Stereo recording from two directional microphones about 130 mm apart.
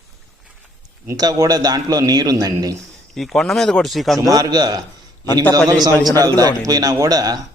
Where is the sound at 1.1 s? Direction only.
30° right (ahead or behind).